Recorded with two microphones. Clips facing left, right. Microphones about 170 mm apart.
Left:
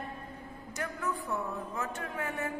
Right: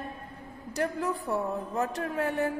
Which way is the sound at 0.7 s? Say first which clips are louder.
Right 6 dB; 35° right (ahead or behind).